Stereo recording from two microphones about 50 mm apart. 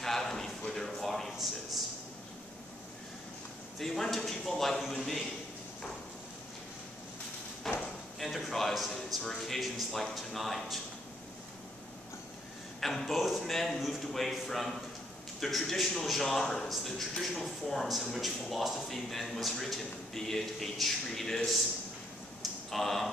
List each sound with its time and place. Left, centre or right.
0.0 s a sound: centre
3.8 s a man's voice: centre
7.7 s a sound: centre
8.2 s a man's voice: centre
12.8 s a man's voice: centre
22.7 s a man's voice: centre